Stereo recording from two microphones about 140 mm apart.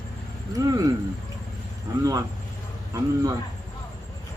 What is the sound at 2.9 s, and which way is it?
Speech, 20° right (ahead or behind).